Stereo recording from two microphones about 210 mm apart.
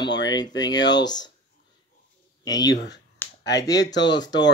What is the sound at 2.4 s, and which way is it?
Speech, 20° left (ahead or behind).